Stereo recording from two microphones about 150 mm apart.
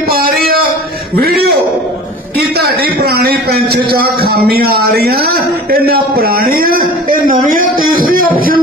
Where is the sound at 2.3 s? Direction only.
90° right.